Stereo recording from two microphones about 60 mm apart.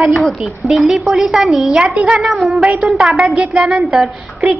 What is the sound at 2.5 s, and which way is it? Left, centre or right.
A woman's voice, centre.